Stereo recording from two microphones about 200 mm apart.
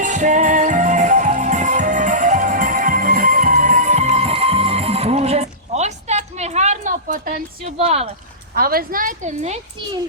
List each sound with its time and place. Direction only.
0.0 s music: 40° right (ahead or behind)
8.5 s a woman's voice: 50° right (ahead or behind)